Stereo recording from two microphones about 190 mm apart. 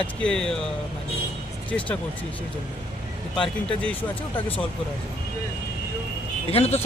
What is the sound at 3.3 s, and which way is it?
Speech, 5° left (ahead or behind).